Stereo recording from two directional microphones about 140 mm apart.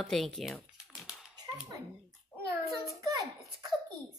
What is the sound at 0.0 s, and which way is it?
Speech, centre (ahead or behind).